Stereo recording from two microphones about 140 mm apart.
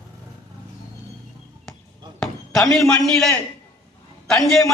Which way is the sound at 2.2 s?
Centre (ahead or behind).